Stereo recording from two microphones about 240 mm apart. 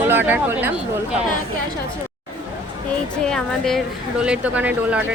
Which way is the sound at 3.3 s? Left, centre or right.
Centre.